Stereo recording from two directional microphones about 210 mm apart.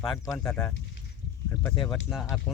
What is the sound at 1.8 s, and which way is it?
Speech, centre (ahead or behind).